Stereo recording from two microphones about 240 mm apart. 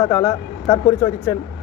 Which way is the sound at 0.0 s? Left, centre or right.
Centre.